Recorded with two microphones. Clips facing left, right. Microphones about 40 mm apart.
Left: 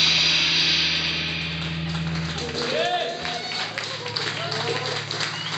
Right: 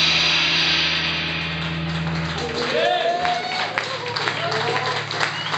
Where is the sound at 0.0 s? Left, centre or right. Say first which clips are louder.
Right 2 dB; centre.